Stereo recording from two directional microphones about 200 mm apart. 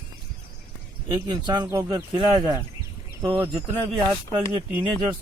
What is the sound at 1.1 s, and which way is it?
Speech, 20° right (ahead or behind).